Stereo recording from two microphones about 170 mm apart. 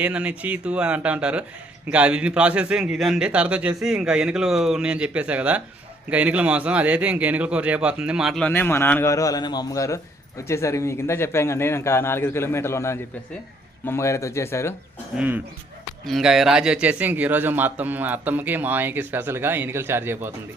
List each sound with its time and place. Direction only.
0.0 s a man's voice: 5° right (ahead or behind); by 14.8 s 15° left (ahead or behind)
16.0 s a man's voice: centre (ahead or behind)